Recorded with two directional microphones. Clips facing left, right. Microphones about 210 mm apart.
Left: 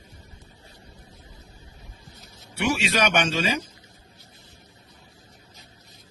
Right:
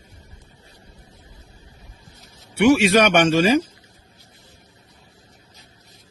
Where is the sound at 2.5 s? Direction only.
60° right (ahead or behind).